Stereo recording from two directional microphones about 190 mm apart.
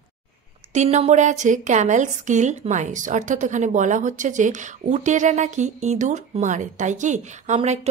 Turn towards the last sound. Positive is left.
turn(degrees=-35)  # may be behind; listen again after turning